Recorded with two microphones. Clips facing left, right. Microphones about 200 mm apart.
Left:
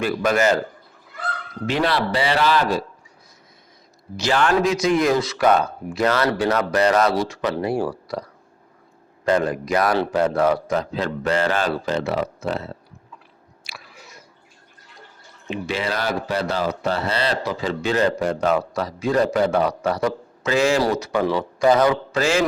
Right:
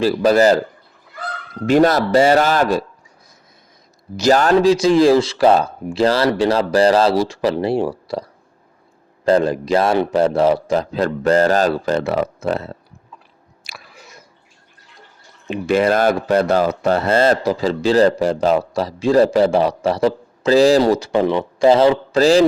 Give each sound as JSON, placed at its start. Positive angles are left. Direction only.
{"t": 0.0, "sound": "speech", "side_deg": -35}
{"t": 1.6, "sound": "speech", "side_deg": -45}
{"t": 4.2, "sound": "speech", "side_deg": -40}
{"t": 9.2, "sound": "a man's voice", "side_deg": -30}
{"t": 10.9, "sound": "speech", "side_deg": -40}
{"t": 13.7, "sound": "chewing", "side_deg": -45}
{"t": 15.4, "sound": "speech", "side_deg": -50}